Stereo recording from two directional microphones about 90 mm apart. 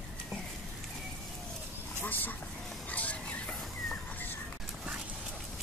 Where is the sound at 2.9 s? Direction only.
15° left (ahead or behind).